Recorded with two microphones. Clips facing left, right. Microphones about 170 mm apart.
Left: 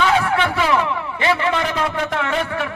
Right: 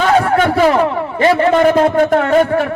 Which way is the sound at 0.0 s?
45° right (ahead or behind).